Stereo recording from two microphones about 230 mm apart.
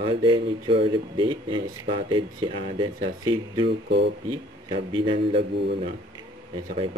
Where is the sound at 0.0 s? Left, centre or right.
Right.